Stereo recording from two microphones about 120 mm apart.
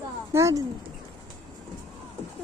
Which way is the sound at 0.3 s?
25° right (ahead or behind).